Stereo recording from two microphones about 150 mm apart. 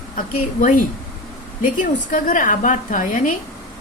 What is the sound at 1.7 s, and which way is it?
A woman's voice, 60° left (ahead or behind).